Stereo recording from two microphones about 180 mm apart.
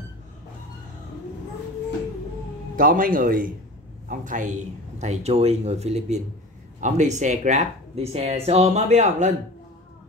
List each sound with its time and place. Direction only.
2.7 s speech: 50° right (ahead or behind)